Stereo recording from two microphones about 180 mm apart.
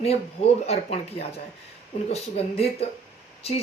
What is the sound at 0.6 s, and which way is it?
Speech, 35° left (ahead or behind).